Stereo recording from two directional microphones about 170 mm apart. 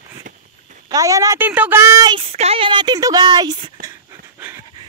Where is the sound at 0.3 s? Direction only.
50° right (ahead or behind).